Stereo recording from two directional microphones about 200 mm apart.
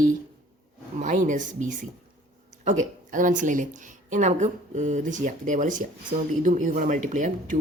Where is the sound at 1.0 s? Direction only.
40° right (ahead or behind).